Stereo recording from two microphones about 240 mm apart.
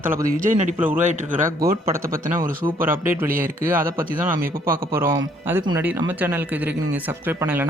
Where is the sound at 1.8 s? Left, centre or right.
Centre.